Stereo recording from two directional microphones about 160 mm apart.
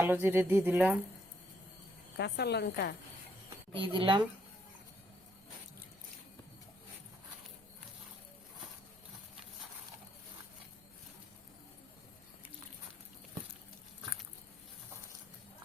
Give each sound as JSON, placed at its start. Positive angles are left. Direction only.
{"t": 0.0, "sound": "speech", "side_deg": -15}
{"t": 2.1, "sound": "a woman's voice", "side_deg": 90}
{"t": 3.8, "sound": "speech", "side_deg": -30}